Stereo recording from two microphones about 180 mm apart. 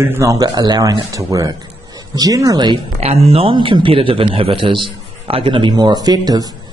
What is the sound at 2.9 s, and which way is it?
A man's voice, 35° right (ahead or behind).